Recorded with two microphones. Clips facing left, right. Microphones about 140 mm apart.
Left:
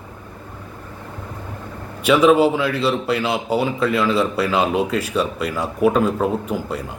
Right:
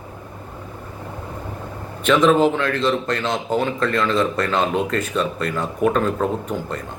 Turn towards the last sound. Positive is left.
turn(degrees=10)  # may be behind; listen again after turning